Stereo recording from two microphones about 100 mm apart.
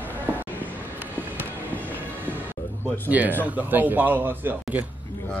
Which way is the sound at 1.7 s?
15° left (ahead or behind).